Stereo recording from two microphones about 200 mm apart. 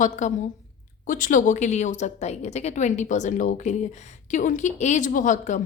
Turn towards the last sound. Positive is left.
turn(degrees=40)  # may be behind; listen again after turning